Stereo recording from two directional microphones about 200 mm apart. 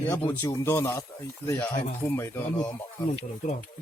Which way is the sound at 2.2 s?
15° left (ahead or behind).